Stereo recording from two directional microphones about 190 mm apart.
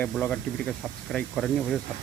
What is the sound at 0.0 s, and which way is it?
Speech, 5° left (ahead or behind).